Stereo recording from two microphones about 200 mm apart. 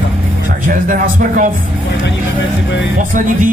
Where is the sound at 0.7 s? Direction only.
40° right (ahead or behind).